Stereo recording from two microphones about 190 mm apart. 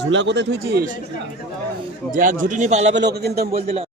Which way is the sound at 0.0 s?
65° right (ahead or behind).